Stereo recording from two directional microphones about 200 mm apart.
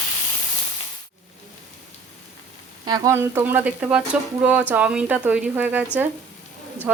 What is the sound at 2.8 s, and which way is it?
Speech, 20° right (ahead or behind).